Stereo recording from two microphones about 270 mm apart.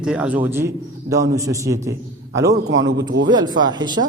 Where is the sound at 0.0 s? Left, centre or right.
Centre.